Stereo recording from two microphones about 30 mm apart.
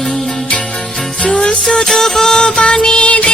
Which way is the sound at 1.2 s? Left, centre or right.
Left.